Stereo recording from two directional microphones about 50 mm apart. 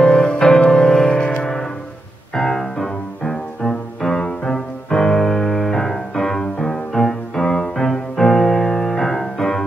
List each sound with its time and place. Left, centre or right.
0.0 s music: centre